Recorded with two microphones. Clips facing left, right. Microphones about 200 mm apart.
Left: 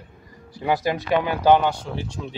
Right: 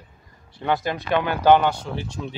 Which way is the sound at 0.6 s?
15° left (ahead or behind).